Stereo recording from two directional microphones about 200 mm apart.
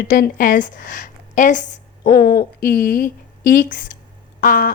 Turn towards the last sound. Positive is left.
turn(degrees=45)  # may be behind; listen again after turning